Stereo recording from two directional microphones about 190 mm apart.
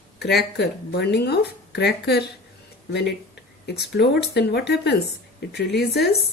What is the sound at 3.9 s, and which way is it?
Speech, 60° left (ahead or behind).